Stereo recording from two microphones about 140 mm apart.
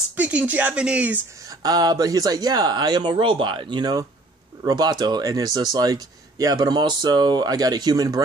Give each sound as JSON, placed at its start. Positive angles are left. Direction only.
{"t": 0.2, "sound": "speech", "side_deg": -10}
{"t": 1.6, "sound": "speech", "side_deg": -30}